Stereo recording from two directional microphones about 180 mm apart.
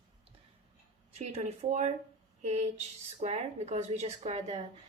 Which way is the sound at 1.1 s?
35° right (ahead or behind).